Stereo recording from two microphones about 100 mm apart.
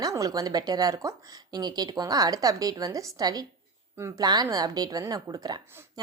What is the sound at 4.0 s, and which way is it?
Speech, 25° right (ahead or behind).